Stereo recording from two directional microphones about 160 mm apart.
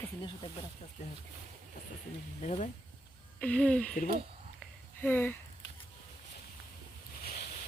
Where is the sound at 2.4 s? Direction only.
50° left (ahead or behind).